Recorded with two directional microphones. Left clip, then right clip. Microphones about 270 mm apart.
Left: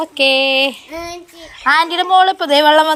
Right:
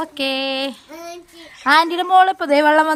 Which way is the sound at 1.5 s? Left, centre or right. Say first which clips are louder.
Left 1 dB; right.